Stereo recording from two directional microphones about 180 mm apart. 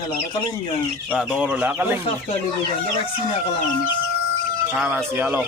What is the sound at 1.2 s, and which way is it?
Speech, 5° right (ahead or behind).